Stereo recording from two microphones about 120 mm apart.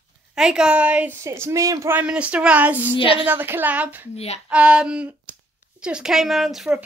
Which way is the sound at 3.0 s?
45° left (ahead or behind).